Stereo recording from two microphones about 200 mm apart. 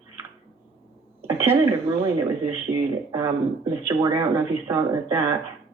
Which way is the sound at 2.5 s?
15° right (ahead or behind).